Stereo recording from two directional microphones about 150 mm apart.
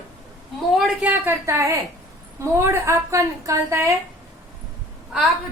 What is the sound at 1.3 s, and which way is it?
A woman's voice, 20° right (ahead or behind).